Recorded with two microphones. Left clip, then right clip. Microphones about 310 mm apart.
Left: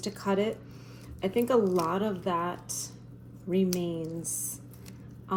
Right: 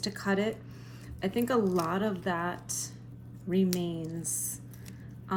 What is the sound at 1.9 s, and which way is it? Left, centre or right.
Speech, right.